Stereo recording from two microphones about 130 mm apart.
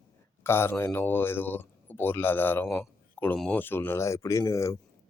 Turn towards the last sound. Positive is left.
turn(degrees=20)  # may be behind; listen again after turning